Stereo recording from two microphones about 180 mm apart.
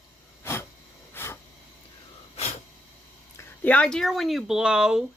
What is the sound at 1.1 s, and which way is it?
Hiss, 15° left (ahead or behind).